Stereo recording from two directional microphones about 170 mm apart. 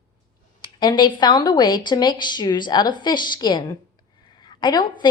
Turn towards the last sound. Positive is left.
turn(degrees=25)  # may be behind; listen again after turning